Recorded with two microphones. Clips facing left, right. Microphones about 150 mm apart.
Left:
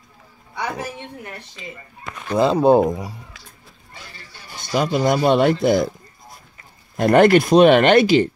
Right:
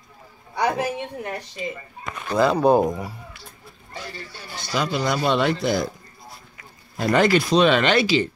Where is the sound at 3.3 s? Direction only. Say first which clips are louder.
Right 2 dB; 90° left.